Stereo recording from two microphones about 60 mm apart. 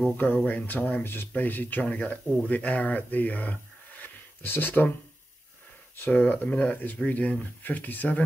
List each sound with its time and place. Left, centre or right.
0.0 s speech: left
1.9 s speech: left
5.9 s speech: left